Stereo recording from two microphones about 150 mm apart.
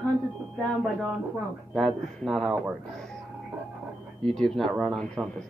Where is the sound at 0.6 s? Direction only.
Centre (ahead or behind).